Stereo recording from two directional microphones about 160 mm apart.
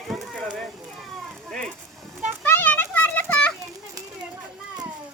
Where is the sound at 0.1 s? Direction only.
Centre (ahead or behind).